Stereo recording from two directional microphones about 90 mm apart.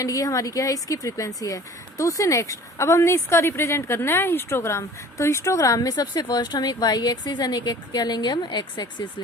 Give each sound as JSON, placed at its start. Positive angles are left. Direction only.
{"t": 0.0, "sound": "speech", "side_deg": 40}